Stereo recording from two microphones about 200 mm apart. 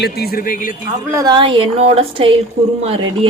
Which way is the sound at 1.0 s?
15° right (ahead or behind).